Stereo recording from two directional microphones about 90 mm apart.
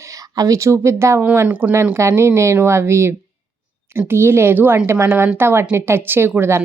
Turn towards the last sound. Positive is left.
turn(degrees=-25)  # may be behind; listen again after turning